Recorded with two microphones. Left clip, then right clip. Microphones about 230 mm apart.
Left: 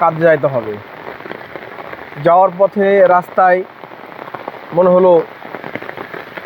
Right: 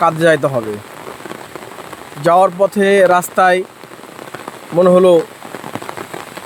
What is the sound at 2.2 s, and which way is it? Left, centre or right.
Speech, right.